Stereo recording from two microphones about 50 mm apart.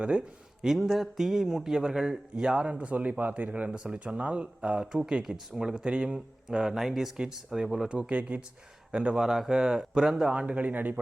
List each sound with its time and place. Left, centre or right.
0.0 s speech: right
3.7 s speech: centre
7.9 s speech: right
10.4 s speech: right